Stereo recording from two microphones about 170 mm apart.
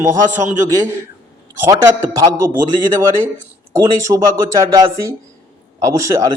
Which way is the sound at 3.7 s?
20° right (ahead or behind).